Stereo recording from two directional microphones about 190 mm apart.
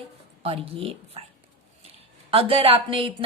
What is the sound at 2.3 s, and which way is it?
Speech, 30° right (ahead or behind).